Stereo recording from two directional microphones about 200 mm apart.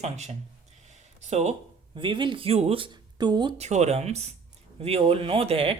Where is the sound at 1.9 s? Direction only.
25° right (ahead or behind).